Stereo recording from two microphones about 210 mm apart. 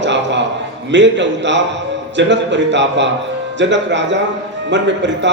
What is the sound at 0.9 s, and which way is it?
A man's voice, 60° right (ahead or behind).